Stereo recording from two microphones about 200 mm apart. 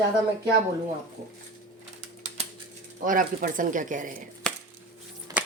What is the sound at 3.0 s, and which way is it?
Speech, 40° right (ahead or behind).